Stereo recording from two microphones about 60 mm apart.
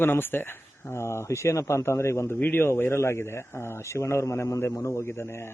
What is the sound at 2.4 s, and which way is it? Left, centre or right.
A man's voice, left.